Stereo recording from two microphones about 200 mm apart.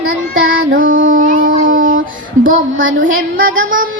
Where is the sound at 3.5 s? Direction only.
80° right.